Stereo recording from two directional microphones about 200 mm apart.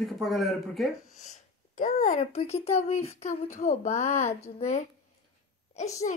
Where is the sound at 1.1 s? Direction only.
35° left (ahead or behind).